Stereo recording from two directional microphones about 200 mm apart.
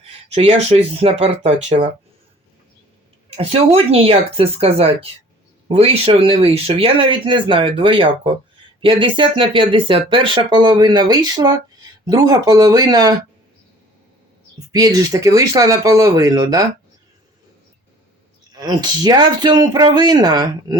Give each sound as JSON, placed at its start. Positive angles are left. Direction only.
{"t": 0.3, "sound": "speech", "side_deg": -30}
{"t": 3.2, "sound": "speech", "side_deg": -30}
{"t": 14.7, "sound": "speech", "side_deg": -20}
{"t": 18.5, "sound": "speech", "side_deg": -20}